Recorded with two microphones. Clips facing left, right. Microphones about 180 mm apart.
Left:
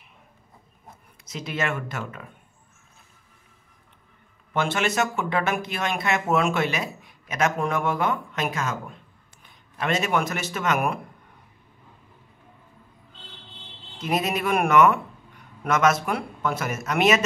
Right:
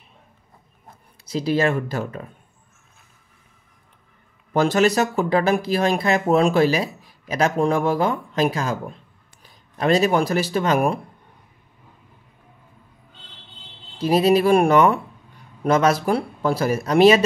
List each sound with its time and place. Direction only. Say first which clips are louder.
1.2 s speech: right 9 dB; 30° right (ahead or behind)
4.6 s speech: right 7 dB; 35° right (ahead or behind)
13.9 s speech: right 9 dB; 30° right (ahead or behind)